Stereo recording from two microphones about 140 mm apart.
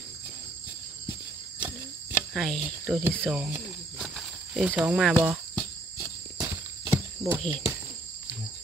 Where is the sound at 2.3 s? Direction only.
5° left (ahead or behind).